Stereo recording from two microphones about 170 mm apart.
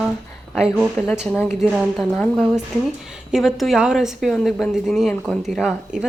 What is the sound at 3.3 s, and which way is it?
A woman's voice, centre (ahead or behind).